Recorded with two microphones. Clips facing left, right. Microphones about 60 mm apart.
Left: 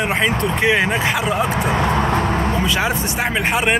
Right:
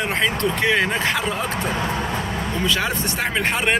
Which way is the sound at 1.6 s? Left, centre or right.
Left.